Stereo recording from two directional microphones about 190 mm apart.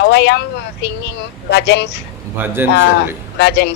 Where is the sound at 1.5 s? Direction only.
60° left (ahead or behind).